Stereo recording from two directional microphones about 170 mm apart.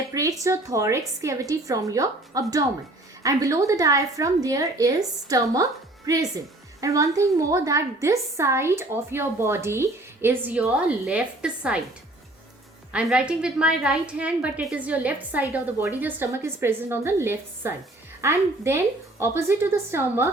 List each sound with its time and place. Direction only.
0.1 s a woman's voice: 20° right (ahead or behind)
12.9 s a woman's voice: 5° right (ahead or behind)